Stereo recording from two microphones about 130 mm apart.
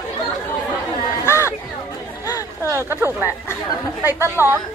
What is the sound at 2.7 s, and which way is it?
A woman's voice, 20° right (ahead or behind).